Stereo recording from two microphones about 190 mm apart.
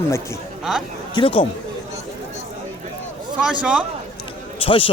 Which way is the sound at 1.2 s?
30° left (ahead or behind).